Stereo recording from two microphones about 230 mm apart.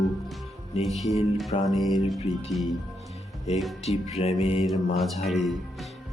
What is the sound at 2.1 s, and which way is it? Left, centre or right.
Speech, left.